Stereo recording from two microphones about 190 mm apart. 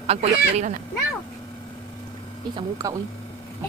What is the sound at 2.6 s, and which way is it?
Speech, 20° right (ahead or behind).